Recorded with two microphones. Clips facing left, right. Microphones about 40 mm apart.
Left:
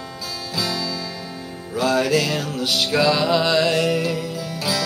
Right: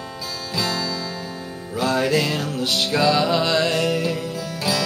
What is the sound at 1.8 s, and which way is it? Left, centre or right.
Music, centre.